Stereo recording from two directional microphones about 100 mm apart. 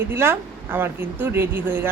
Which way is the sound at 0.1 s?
25° right (ahead or behind).